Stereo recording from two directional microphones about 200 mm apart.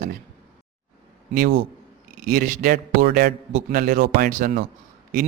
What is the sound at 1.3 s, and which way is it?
A man's voice, 45° right (ahead or behind).